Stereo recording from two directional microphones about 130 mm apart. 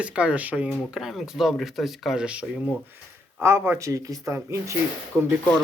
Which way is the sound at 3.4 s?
20° right (ahead or behind).